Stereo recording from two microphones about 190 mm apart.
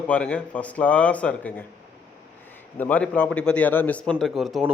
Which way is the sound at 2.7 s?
10° left (ahead or behind).